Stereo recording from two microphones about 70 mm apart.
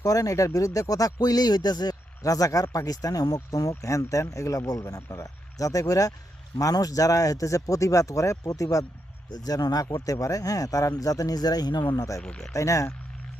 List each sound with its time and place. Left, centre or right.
0.0 s speech: left
9.3 s speech: left
12.2 s speech: centre
12.5 s speech: left